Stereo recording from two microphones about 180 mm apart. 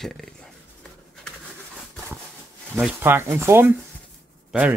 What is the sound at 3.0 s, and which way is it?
Speech, 15° right (ahead or behind).